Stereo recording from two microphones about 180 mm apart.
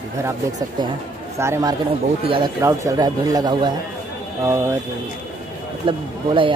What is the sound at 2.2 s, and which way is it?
A man's voice, 30° right (ahead or behind).